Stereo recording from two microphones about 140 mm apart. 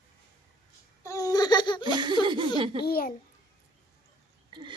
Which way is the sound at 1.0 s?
25° left (ahead or behind).